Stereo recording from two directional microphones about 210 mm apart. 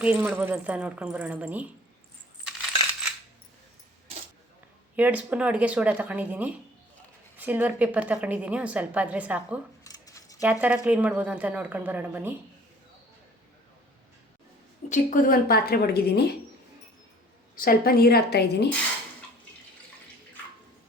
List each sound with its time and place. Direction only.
0.0 s a woman's voice: 5° right (ahead or behind)
4.9 s a woman's voice: 5° right (ahead or behind)
9.8 s a sound: 15° left (ahead or behind)
10.4 s a woman's voice: 5° right (ahead or behind)
14.8 s a woman's voice: 35° left (ahead or behind)
17.6 s a woman's voice: 45° left (ahead or behind)